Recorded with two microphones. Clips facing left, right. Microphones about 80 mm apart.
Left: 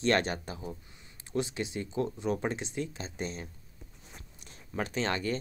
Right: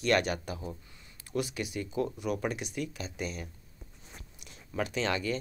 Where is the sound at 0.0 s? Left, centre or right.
Left.